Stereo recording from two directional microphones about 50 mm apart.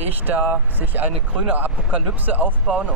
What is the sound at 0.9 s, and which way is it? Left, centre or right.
Speech, right.